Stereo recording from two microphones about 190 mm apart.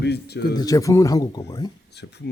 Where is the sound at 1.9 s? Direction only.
60° left (ahead or behind).